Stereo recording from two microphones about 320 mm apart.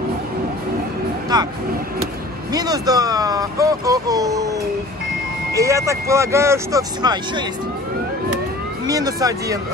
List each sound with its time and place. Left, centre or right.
1.3 s speech: centre
2.5 s speech: centre
5.5 s speech: centre
8.8 s speech: centre